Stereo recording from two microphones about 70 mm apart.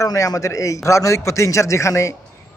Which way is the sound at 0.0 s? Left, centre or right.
Left.